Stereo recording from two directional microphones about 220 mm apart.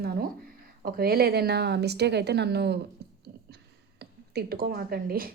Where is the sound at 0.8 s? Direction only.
40° right (ahead or behind).